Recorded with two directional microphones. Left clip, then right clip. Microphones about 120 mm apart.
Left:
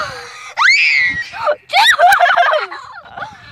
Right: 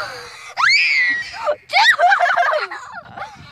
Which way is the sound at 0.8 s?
25° left (ahead or behind).